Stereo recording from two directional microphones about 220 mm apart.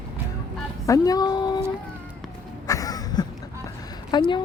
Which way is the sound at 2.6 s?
15° left (ahead or behind).